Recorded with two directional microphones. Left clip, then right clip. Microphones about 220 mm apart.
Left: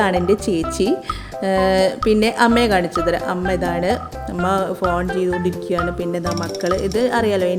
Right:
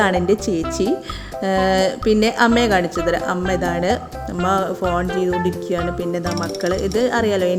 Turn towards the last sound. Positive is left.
turn(degrees=0)  # may be behind; listen again after turning